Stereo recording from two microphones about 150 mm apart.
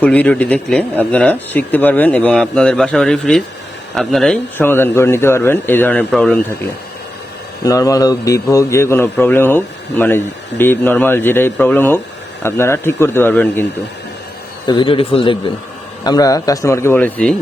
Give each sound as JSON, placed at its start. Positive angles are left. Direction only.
{"t": 0.0, "sound": "a man's voice", "side_deg": 10}
{"t": 4.5, "sound": "a man's voice", "side_deg": 15}
{"t": 7.6, "sound": "a man's voice", "side_deg": 20}
{"t": 14.7, "sound": "a man's voice", "side_deg": 35}
{"t": 16.0, "sound": "speech", "side_deg": 25}